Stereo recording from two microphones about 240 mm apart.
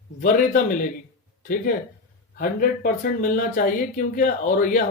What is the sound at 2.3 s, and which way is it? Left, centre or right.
Speech, left.